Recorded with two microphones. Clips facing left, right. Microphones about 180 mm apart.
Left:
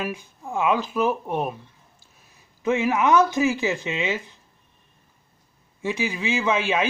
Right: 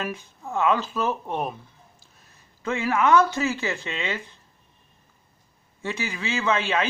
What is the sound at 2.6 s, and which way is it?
A man's voice, 15° left (ahead or behind).